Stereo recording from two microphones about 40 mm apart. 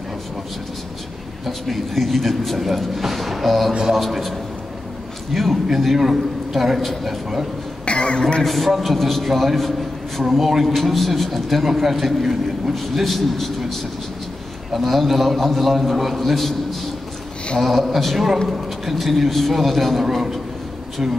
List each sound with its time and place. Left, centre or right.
1.4 s a man's voice: centre
7.8 s a sound: left
8.2 s speech: centre
8.5 s a man's voice: centre
17.6 s a man's voice: centre